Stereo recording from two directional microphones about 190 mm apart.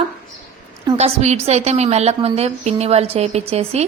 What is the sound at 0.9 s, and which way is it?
A woman's voice, 35° right (ahead or behind).